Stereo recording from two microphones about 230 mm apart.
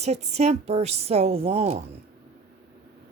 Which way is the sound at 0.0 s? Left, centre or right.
Right.